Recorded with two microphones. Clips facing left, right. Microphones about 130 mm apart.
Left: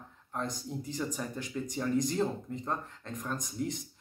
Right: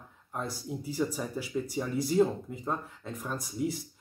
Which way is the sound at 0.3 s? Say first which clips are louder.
Right 1 dB; 5° right (ahead or behind).